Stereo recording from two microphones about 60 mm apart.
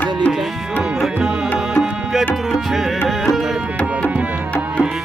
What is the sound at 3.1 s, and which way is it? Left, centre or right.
Carnatic music, centre.